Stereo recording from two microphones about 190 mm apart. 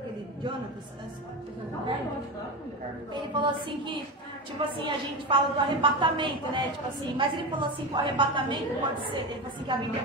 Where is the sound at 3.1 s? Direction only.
25° right (ahead or behind).